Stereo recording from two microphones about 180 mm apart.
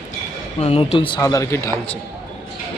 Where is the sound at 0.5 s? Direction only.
35° left (ahead or behind); by 1.7 s 15° left (ahead or behind).